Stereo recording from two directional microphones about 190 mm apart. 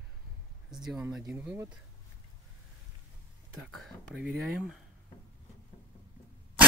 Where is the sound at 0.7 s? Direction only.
Centre (ahead or behind).